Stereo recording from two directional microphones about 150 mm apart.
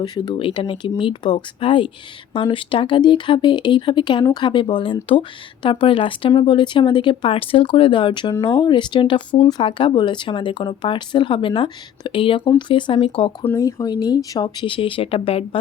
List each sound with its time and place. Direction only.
0.0 s speech: 30° left (ahead or behind)
13.6 s speech: 25° left (ahead or behind); by 15.4 s 40° left (ahead or behind)